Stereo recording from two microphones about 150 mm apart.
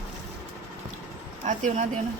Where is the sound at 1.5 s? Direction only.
55° right (ahead or behind).